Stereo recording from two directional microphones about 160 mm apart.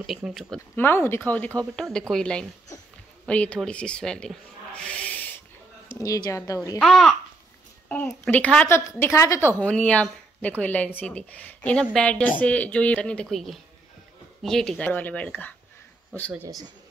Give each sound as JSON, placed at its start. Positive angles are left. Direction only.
{"t": 0.0, "sound": "speech", "side_deg": 0}
{"t": 0.7, "sound": "a woman's voice", "side_deg": 15}
{"t": 5.9, "sound": "speech", "side_deg": 20}
{"t": 6.8, "sound": "a woman's voice", "side_deg": 5}
{"t": 16.3, "sound": "speech", "side_deg": -15}